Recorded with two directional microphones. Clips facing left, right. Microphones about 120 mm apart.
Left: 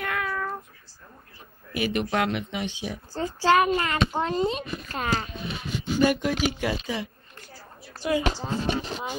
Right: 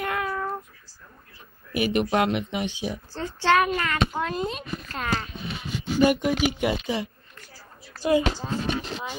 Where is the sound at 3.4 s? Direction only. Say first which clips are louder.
Left 1 dB; 30° left (ahead or behind).